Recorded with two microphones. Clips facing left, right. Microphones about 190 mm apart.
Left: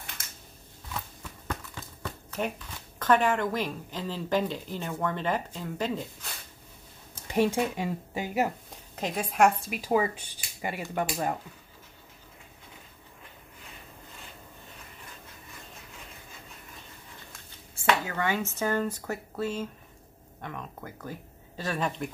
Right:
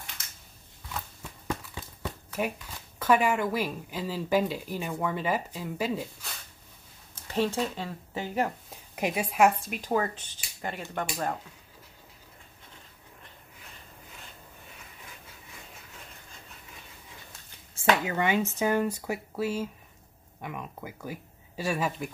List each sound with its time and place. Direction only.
1.5 s a sound: 10° right (ahead or behind)
3.0 s a woman's voice: 10° right (ahead or behind)
7.2 s speech: 15° left (ahead or behind)
8.9 s speech: 10° right (ahead or behind); by 11.3 s 10° left (ahead or behind)
18.0 s a woman's voice: 20° right (ahead or behind)